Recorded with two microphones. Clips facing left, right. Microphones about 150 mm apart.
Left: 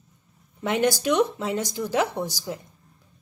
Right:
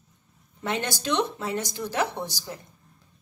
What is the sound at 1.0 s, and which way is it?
A woman's voice, 15° left (ahead or behind).